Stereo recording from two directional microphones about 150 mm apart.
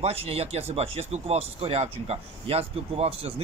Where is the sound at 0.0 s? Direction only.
40° right (ahead or behind).